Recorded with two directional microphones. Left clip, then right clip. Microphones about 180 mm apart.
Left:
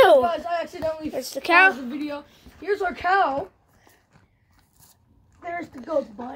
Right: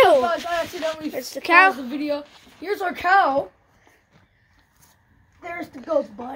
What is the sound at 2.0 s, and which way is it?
A woman's voice, 20° right (ahead or behind).